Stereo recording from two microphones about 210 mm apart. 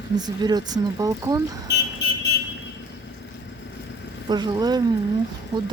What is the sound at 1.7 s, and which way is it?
Car alarm, 55° left (ahead or behind).